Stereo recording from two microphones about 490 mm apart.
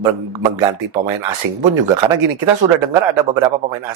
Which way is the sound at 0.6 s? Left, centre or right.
Right.